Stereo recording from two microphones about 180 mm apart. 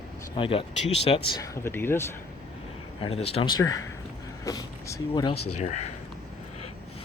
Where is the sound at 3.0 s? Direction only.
35° left (ahead or behind).